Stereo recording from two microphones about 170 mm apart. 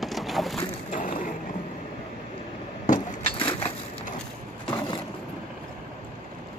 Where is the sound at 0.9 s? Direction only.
50° left (ahead or behind).